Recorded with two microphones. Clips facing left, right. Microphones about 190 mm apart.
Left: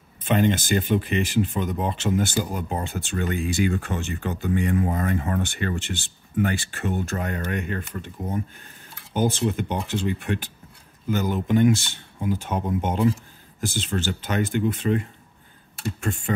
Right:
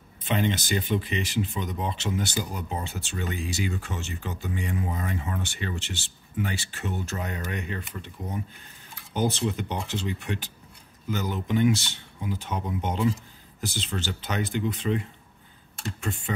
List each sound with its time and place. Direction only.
0.2 s speech: 50° left (ahead or behind)